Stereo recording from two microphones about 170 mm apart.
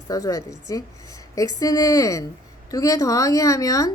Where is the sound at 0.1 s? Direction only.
20° left (ahead or behind).